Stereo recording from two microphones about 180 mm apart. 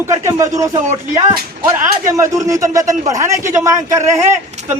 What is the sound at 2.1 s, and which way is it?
Speech, 15° right (ahead or behind).